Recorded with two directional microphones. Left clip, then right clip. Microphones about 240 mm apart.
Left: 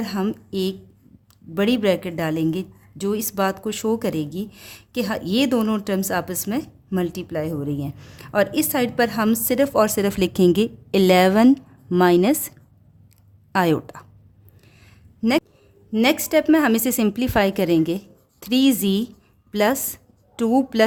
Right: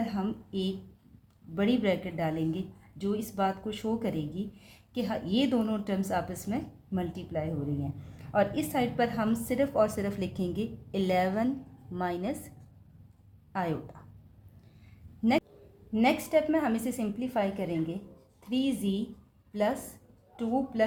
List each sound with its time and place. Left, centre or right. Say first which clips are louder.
0.0 s a woman's voice: left 8 dB; left
13.5 s a woman's voice: left 13 dB; left
15.2 s a sound: left 7 dB; left
15.9 s a woman's voice: left 7 dB; left